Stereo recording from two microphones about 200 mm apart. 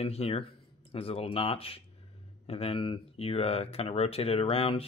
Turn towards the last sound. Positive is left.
turn(degrees=30)  # may be behind; listen again after turning